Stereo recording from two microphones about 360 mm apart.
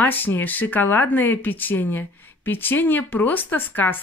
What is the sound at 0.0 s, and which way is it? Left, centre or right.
Speech, centre.